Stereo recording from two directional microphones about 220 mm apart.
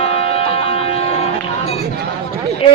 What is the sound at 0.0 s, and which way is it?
Music, 25° left (ahead or behind).